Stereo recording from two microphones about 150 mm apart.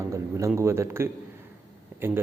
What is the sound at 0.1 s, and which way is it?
A man's voice, 20° right (ahead or behind).